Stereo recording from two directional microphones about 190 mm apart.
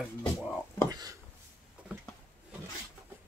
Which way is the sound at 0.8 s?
20° right (ahead or behind).